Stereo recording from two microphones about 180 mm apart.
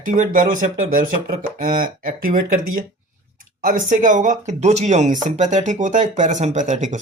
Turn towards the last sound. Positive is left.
turn(degrees=-40)  # may be behind; listen again after turning